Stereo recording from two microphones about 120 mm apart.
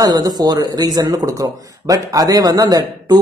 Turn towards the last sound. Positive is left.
turn(degrees=-30)  # may be behind; listen again after turning